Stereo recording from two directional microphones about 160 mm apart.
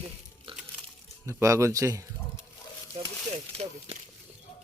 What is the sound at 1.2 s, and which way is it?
Speech, 20° right (ahead or behind).